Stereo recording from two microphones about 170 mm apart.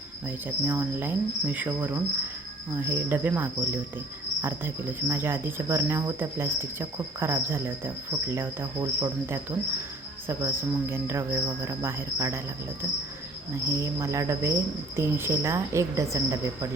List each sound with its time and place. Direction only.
0.3 s cricket: 10° right (ahead or behind)
13.7 s cricket: 15° right (ahead or behind)